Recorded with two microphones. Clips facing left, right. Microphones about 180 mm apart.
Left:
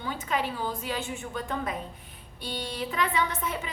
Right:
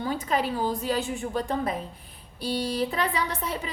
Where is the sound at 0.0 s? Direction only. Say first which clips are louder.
Right 4 dB; 40° right (ahead or behind).